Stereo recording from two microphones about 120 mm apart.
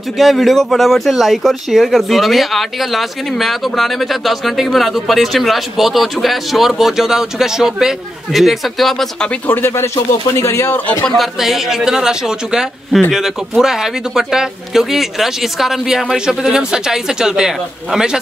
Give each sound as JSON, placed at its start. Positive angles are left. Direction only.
{"t": 0.2, "sound": "speech", "side_deg": 0}
{"t": 9.5, "sound": "speech", "side_deg": 20}
{"t": 11.1, "sound": "speech", "side_deg": 0}